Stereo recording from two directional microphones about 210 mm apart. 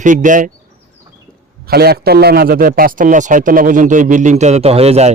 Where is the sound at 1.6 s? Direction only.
50° right (ahead or behind); by 5.1 s 30° right (ahead or behind).